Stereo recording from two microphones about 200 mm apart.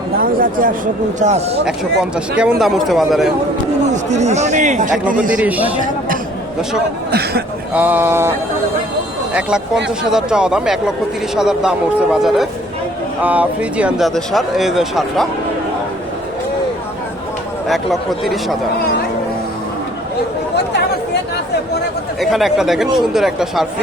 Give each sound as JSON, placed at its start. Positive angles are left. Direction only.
{"t": 0.2, "sound": "speech", "side_deg": -45}
{"t": 1.2, "sound": "speech", "side_deg": -30}
{"t": 1.6, "sound": "speech", "side_deg": -5}
{"t": 3.9, "sound": "speech", "side_deg": -35}
{"t": 5.3, "sound": "speech", "side_deg": -5}
{"t": 7.1, "sound": "speech", "side_deg": -55}
{"t": 7.7, "sound": "speech", "side_deg": -10}
{"t": 10.0, "sound": "speech", "side_deg": -5}
{"t": 17.7, "sound": "speech", "side_deg": 0}
{"t": 22.2, "sound": "speech", "side_deg": 0}